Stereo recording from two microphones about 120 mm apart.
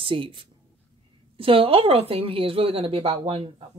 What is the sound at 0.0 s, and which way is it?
A woman's voice, 45° right (ahead or behind).